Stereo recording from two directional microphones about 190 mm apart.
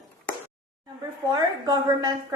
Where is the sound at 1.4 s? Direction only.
20° right (ahead or behind).